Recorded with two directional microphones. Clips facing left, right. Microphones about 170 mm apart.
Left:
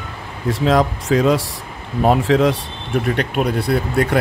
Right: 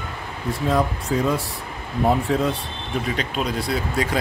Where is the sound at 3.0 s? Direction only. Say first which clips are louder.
Left 6 dB; 60° left (ahead or behind).